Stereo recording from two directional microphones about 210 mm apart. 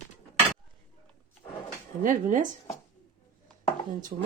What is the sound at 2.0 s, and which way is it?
Speech, 40° right (ahead or behind).